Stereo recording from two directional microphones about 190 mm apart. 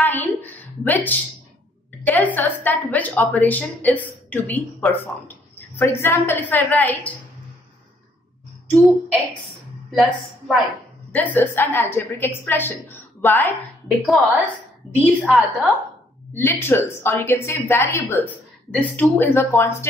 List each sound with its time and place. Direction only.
0.0 s a sound: 10° left (ahead or behind)
2.0 s speech: 10° left (ahead or behind)
10.5 s a woman's voice: 5° left (ahead or behind)
13.8 s a woman's voice: centre (ahead or behind)
16.3 s speech: 10° left (ahead or behind)